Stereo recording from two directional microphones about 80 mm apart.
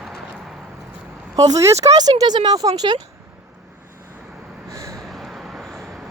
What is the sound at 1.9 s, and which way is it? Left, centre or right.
Speech, right.